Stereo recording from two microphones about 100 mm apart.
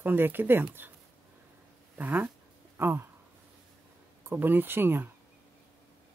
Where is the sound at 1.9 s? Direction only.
20° right (ahead or behind).